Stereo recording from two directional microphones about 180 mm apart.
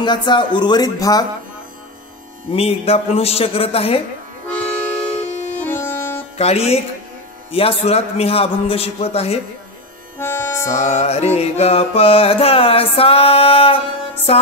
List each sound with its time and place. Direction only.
0.0 s speech: 25° left (ahead or behind)
2.5 s music: 35° left (ahead or behind)
5.6 s music: 15° left (ahead or behind)
6.3 s speech: 35° left (ahead or behind)
7.5 s music: 35° left (ahead or behind)
10.1 s music: 15° left (ahead or behind)
10.7 s music: 40° left (ahead or behind)